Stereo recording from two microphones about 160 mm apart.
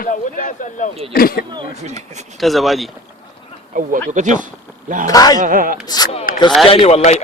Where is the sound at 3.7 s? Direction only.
60° right (ahead or behind).